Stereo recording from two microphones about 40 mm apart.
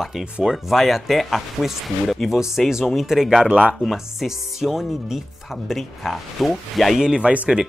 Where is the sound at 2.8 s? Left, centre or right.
Centre.